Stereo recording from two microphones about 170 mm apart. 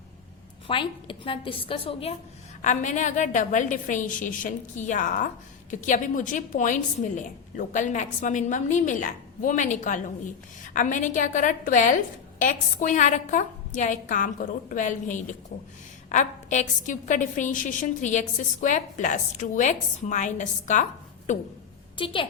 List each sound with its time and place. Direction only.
0.7 s a woman's voice: 30° left (ahead or behind)
2.6 s a woman's voice: 45° left (ahead or behind)
21.9 s a woman's voice: 30° left (ahead or behind)